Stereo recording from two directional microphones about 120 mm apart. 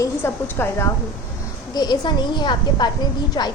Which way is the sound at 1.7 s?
35° left (ahead or behind).